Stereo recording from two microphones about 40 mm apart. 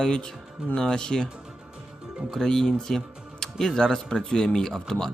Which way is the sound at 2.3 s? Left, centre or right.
Centre.